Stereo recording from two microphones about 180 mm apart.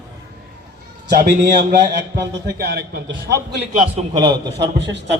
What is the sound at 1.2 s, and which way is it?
A man's voice, 60° right (ahead or behind).